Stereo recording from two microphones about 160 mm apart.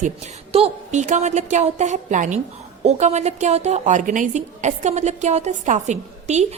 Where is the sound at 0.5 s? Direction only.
40° right (ahead or behind).